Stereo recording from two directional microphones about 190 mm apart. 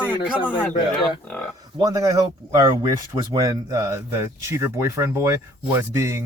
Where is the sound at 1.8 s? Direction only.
20° right (ahead or behind).